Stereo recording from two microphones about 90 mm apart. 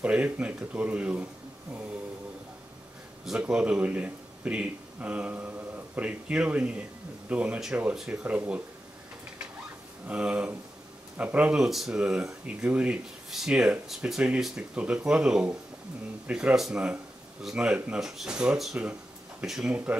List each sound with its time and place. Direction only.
0.0 s speech: 15° right (ahead or behind)
3.3 s speech: 10° right (ahead or behind)
10.0 s speech: 15° right (ahead or behind)
19.7 s speech: 15° right (ahead or behind)